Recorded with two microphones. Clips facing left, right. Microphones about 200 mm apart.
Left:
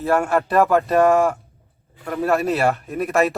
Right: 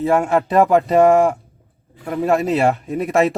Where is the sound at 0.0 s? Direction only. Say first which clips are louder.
Right 3 dB; 15° right (ahead or behind).